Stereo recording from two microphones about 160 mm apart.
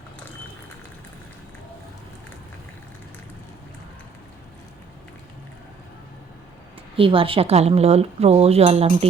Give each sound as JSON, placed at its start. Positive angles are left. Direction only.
{"t": 6.9, "sound": "speech", "side_deg": -35}